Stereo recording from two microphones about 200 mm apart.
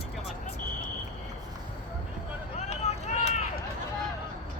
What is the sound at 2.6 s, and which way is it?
Run, 35° left (ahead or behind).